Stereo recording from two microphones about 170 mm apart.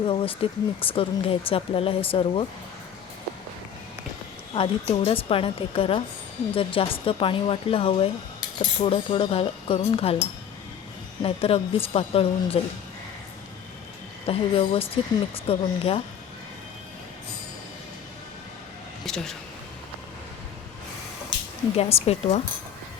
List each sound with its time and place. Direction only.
0.0 s speech: 30° left (ahead or behind)
4.5 s speech: 35° left (ahead or behind)
11.2 s speech: 35° left (ahead or behind)
14.3 s speech: 35° left (ahead or behind)
19.0 s speech: centre (ahead or behind)
21.8 s speech: 35° left (ahead or behind)